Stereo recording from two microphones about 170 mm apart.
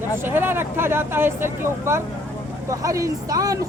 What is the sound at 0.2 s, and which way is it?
Speech, 15° right (ahead or behind).